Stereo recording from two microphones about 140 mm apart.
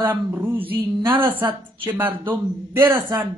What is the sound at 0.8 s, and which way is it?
Speech, 35° right (ahead or behind).